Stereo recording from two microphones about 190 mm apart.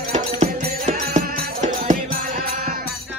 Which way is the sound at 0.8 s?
40° right (ahead or behind).